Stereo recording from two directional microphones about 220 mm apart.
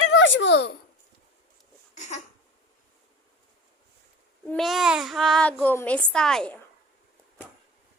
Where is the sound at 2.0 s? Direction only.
35° left (ahead or behind).